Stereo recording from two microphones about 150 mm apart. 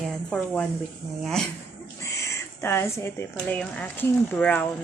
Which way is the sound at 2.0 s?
20° left (ahead or behind).